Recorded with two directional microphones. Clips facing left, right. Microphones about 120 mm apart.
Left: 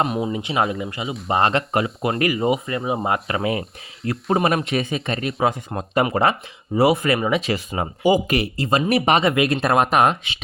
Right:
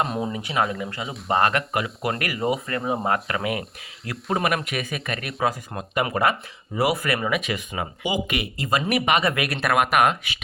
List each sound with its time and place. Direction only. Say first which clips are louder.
0.3 s speech: left 3 dB; 25° left (ahead or behind)